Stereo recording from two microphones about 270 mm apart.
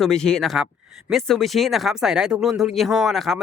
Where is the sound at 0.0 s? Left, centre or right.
Centre.